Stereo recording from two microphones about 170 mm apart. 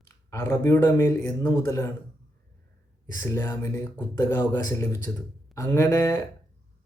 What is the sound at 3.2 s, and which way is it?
Speech, 15° left (ahead or behind).